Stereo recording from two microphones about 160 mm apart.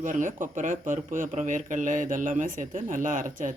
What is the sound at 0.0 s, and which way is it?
Speech, 50° right (ahead or behind).